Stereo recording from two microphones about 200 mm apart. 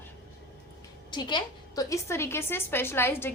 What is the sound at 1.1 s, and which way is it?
A woman's voice, 20° left (ahead or behind).